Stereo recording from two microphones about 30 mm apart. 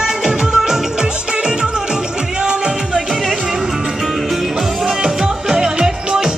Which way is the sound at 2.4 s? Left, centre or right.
Right.